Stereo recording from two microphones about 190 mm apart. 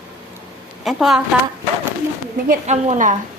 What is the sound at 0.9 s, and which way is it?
Speech, centre (ahead or behind).